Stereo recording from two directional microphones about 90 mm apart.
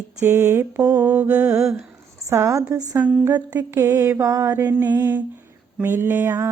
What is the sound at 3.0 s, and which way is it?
Mantra, 10° right (ahead or behind).